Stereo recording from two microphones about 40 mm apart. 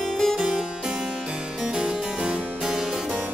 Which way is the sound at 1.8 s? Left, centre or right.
Right.